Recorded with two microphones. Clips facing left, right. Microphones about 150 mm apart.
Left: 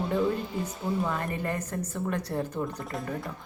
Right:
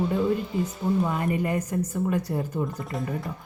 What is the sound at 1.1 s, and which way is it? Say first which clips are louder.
A woman's voice: right 5 dB; 10° right (ahead or behind).